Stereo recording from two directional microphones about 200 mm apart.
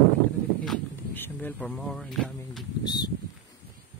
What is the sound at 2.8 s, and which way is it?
Speech, 20° left (ahead or behind).